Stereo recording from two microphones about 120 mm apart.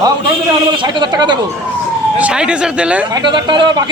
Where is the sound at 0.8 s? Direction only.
40° right (ahead or behind).